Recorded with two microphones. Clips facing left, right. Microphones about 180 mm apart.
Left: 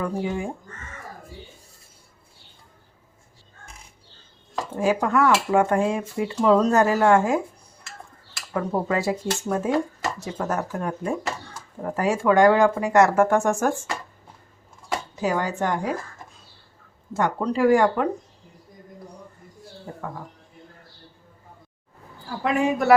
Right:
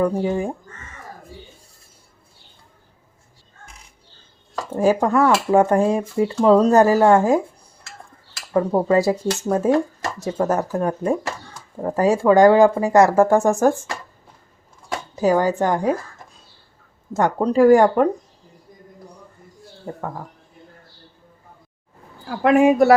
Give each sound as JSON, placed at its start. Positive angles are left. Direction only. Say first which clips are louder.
{"t": 0.0, "sound": "speech", "louder": "right 6 dB", "side_deg": -35}
{"t": 4.8, "sound": "speech", "louder": "right 4 dB", "side_deg": -40}
{"t": 8.5, "sound": "speech", "louder": "right 7 dB", "side_deg": -35}
{"t": 15.2, "sound": "speech", "louder": "right 8 dB", "side_deg": -40}
{"t": 17.2, "sound": "speech", "louder": "right 6 dB", "side_deg": -45}
{"t": 22.4, "sound": "speech", "louder": "right 8 dB", "side_deg": -55}